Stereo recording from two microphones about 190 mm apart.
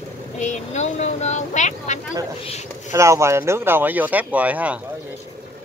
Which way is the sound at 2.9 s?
15° right (ahead or behind).